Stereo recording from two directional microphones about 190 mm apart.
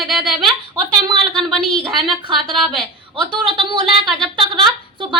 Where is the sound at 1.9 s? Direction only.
25° right (ahead or behind).